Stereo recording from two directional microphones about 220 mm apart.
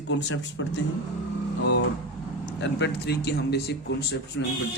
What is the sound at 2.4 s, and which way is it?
Speech, 50° left (ahead or behind).